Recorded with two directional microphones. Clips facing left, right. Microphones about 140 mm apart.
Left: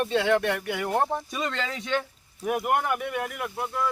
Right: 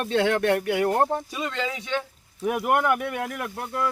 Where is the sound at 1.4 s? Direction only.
10° right (ahead or behind).